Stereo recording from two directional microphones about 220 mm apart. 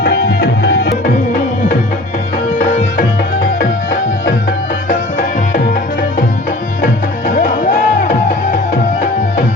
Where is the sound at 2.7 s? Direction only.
30° left (ahead or behind).